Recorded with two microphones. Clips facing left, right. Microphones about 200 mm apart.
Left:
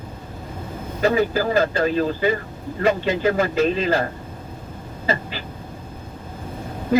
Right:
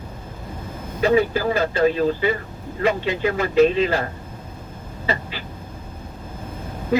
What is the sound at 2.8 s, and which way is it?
Speech, 45° left (ahead or behind).